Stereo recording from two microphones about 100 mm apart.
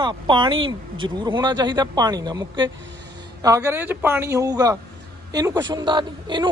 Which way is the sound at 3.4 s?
30° right (ahead or behind).